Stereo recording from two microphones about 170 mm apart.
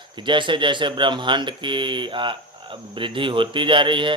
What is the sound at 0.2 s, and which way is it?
Speech, 30° right (ahead or behind).